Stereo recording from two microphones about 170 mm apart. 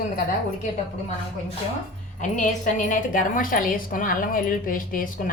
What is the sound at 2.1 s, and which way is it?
A woman's voice, 45° left (ahead or behind).